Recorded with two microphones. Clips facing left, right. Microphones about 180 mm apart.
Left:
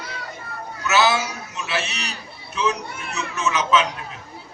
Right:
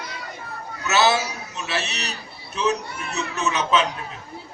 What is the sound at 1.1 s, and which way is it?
A man's voice, 35° right (ahead or behind).